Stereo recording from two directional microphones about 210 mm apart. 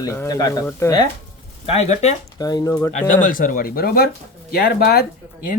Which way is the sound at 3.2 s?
40° left (ahead or behind).